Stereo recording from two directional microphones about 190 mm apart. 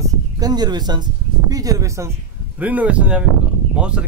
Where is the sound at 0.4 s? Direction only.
20° right (ahead or behind).